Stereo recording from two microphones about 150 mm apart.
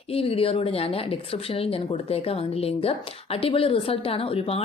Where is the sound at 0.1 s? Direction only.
40° left (ahead or behind).